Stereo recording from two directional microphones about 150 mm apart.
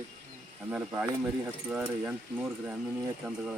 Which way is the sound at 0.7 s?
10° right (ahead or behind).